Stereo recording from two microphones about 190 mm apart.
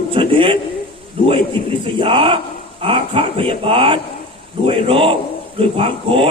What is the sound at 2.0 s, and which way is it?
Speech, 25° right (ahead or behind).